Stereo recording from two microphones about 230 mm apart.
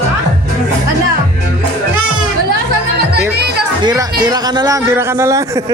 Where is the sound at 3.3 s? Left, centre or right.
Right.